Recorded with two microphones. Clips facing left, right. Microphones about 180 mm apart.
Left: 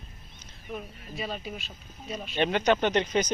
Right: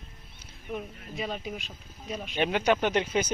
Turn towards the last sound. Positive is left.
turn(degrees=-5)  # may be behind; listen again after turning